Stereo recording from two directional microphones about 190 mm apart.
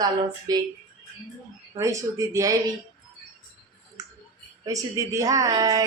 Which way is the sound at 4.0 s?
20° right (ahead or behind).